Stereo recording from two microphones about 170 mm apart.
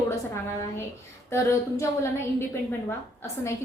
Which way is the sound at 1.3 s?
20° left (ahead or behind).